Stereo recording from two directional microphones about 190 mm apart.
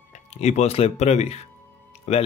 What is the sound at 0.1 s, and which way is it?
Speech, 35° left (ahead or behind).